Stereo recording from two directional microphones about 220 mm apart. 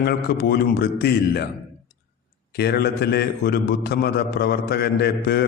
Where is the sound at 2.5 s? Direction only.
45° left (ahead or behind).